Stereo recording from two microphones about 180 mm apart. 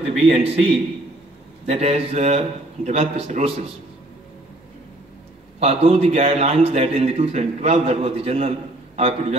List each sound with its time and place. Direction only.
0.4 s a man's voice: 35° right (ahead or behind)
5.6 s a man's voice: 35° right (ahead or behind)